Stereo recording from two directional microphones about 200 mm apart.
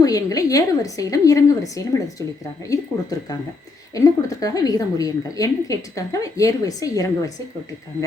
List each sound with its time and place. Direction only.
0.0 s a woman's voice: 15° left (ahead or behind)